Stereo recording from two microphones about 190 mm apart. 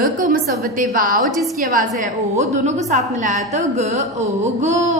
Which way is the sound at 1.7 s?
40° right (ahead or behind).